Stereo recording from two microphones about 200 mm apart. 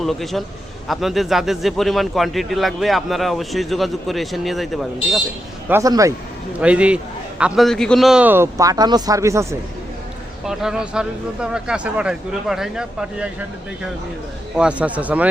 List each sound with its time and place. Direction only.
0.0 s a man's voice: centre (ahead or behind)
5.6 s a man's voice: 15° right (ahead or behind)
6.6 s a man's voice: 5° right (ahead or behind)
10.4 s a man's voice: centre (ahead or behind)
14.5 s a man's voice: 5° right (ahead or behind)